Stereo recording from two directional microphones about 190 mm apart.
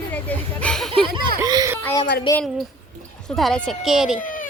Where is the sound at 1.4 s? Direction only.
20° right (ahead or behind).